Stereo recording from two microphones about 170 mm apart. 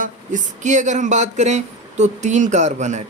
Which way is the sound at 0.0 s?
50° right (ahead or behind).